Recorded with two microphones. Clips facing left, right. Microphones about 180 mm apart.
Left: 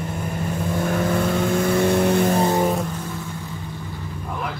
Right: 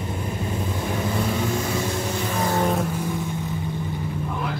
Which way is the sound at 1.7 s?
60° left (ahead or behind).